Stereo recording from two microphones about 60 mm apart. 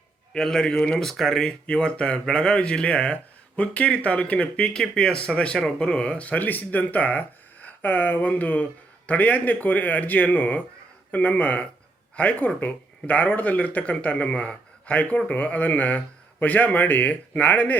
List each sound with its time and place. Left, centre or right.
0.3 s speech: centre; by 17.7 s left